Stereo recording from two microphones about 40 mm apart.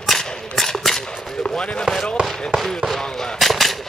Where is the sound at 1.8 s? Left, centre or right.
Centre.